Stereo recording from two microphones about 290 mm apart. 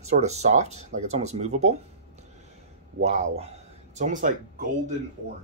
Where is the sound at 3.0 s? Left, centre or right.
Right.